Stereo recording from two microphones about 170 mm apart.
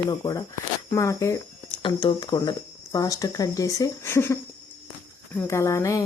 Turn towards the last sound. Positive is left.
turn(degrees=20)  # may be behind; listen again after turning